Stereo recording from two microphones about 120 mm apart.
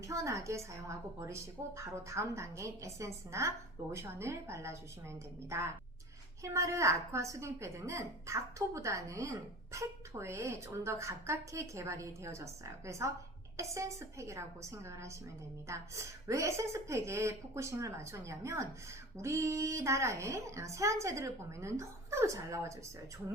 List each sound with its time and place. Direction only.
0.0 s speech: 25° right (ahead or behind)